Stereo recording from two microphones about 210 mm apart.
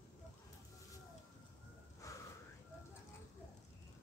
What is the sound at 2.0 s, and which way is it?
Snort, 15° left (ahead or behind).